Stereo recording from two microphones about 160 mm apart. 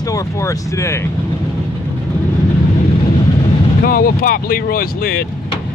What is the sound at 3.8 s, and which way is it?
Speech, 65° left (ahead or behind).